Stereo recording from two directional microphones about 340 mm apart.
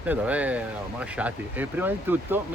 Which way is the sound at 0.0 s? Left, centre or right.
Centre.